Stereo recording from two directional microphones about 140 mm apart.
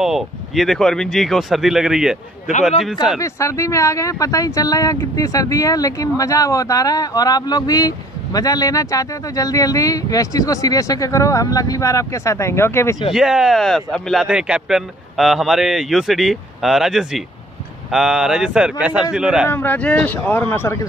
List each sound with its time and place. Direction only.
0.0 s a man's voice: centre (ahead or behind)
3.2 s speech: 20° left (ahead or behind)
13.1 s a man's voice: 5° right (ahead or behind)
19.5 s speech: 15° left (ahead or behind)